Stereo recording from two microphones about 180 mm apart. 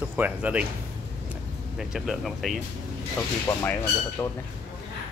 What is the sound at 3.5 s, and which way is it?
Speech, 15° left (ahead or behind).